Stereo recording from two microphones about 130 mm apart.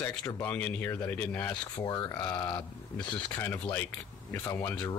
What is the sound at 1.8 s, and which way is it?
Speech, 30° left (ahead or behind).